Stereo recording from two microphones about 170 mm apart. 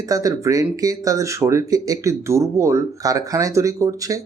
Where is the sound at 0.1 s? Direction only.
20° right (ahead or behind).